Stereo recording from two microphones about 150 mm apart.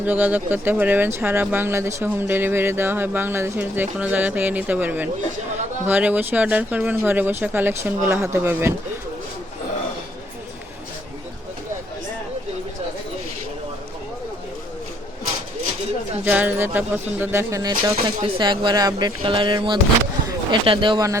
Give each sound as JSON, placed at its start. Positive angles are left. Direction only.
{"t": 0.0, "sound": "speech", "side_deg": -10}
{"t": 16.2, "sound": "speech", "side_deg": -10}